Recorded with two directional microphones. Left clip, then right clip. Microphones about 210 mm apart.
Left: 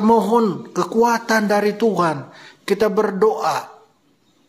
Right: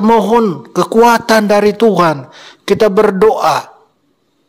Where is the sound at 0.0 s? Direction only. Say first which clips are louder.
Right 6 dB; 35° right (ahead or behind).